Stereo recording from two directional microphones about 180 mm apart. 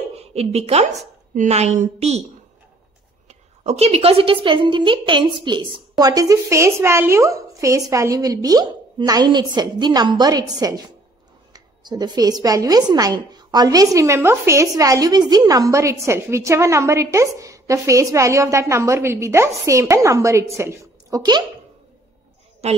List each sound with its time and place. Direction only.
0.1 s a woman's voice: 35° right (ahead or behind)
3.3 s a woman's voice: 35° right (ahead or behind)
22.6 s a woman's voice: 35° right (ahead or behind)